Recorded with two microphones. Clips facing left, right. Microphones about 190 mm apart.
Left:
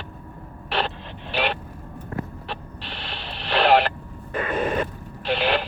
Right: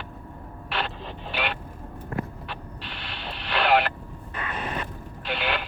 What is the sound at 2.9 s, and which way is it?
Radio, 25° left (ahead or behind).